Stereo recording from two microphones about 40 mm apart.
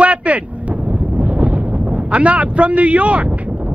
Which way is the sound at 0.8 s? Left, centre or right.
Right.